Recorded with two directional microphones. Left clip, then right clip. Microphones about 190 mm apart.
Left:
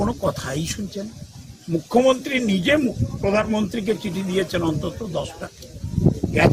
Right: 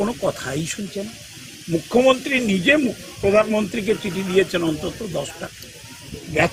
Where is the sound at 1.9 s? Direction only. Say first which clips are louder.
Right 1 dB; 20° left (ahead or behind).